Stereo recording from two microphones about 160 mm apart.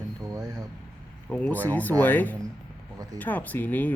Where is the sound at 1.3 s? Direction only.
10° left (ahead or behind).